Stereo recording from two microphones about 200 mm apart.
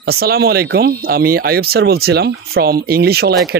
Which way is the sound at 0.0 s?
50° right (ahead or behind).